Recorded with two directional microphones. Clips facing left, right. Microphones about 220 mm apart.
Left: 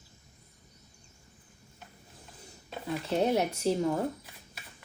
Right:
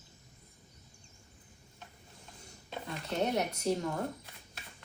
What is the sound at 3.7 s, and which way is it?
Speech, 30° left (ahead or behind).